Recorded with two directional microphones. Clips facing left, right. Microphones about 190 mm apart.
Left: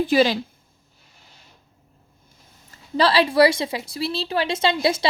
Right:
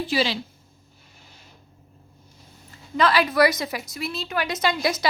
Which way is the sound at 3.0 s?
30° left (ahead or behind).